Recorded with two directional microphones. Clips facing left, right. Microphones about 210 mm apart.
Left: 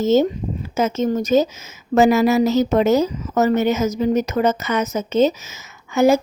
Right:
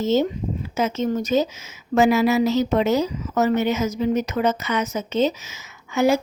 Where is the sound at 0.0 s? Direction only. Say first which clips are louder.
Left 4 dB; 45° left (ahead or behind).